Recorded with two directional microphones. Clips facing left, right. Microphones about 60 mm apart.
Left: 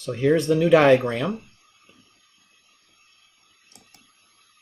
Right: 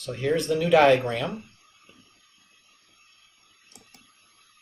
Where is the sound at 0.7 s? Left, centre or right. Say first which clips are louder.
Left 2 dB; left.